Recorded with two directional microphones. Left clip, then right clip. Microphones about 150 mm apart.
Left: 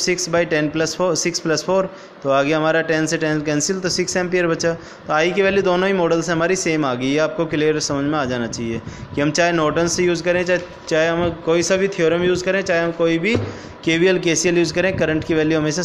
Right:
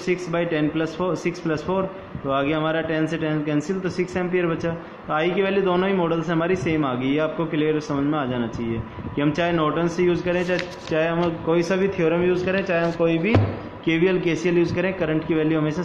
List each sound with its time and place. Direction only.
0.0 s speech: 45° left (ahead or behind)